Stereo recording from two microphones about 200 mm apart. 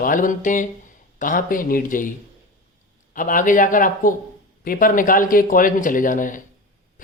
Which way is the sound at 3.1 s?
40° left (ahead or behind).